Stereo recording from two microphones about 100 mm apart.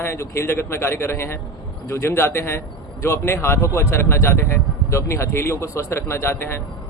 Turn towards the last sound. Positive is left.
turn(degrees=25)  # may be behind; listen again after turning